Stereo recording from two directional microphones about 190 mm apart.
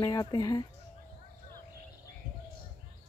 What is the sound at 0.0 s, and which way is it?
Speech, 20° left (ahead or behind).